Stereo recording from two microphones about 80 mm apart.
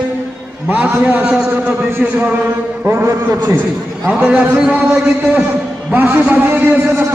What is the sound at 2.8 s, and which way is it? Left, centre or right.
Speech, right.